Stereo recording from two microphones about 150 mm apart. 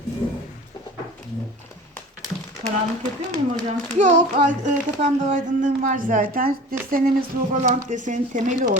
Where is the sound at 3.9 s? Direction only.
55° right (ahead or behind).